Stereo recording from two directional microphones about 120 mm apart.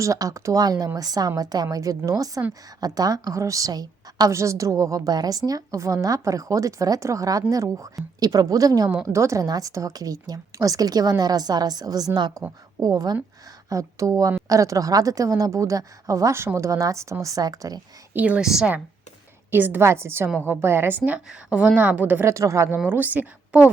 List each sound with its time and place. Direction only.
0.0 s a woman's voice: 30° right (ahead or behind)
18.1 s a woman's voice: 10° right (ahead or behind)